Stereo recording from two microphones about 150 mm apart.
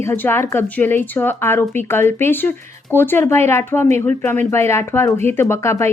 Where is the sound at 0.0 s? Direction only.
15° left (ahead or behind).